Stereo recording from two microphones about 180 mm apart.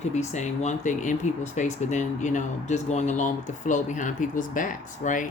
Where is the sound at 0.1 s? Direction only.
40° left (ahead or behind).